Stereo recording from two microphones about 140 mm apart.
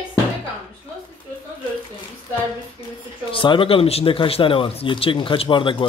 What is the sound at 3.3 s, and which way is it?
Speech, 35° left (ahead or behind).